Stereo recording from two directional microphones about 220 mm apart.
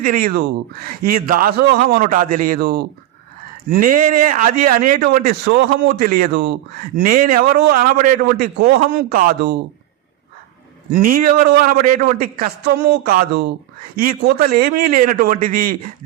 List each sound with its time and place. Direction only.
0.0 s a man's voice: 40° right (ahead or behind)
10.9 s a man's voice: 40° right (ahead or behind)